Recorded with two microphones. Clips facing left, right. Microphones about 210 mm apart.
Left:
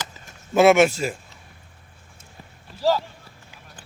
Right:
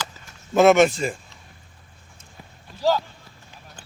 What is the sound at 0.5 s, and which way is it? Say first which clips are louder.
Speech: even; 5° left (ahead or behind).